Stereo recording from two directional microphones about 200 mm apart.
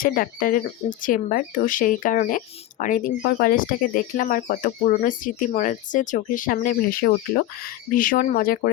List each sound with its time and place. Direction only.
0.0 s speech: 45° left (ahead or behind)